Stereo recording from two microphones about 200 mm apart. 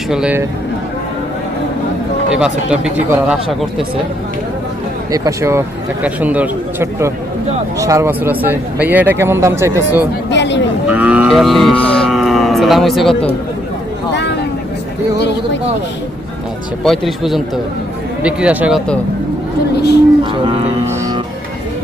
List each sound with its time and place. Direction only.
0.1 s speech: 5° right (ahead or behind)
2.3 s speech: 5° right (ahead or behind)
5.1 s speech: 15° right (ahead or behind)
10.2 s a sound: 60° left (ahead or behind)
10.8 s moo: 5° right (ahead or behind)
14.1 s a sound: 60° left (ahead or behind)
16.8 s speech: centre (ahead or behind)
19.7 s a sound: 55° left (ahead or behind)
20.3 s speech: 25° right (ahead or behind)